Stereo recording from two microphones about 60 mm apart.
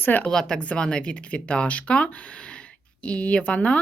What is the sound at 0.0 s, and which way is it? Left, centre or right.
Speech, left.